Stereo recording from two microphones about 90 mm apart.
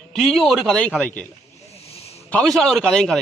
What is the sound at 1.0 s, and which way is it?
Speech, 15° left (ahead or behind).